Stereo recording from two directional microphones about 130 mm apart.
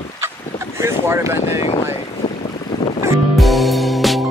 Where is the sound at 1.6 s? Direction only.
50° left (ahead or behind).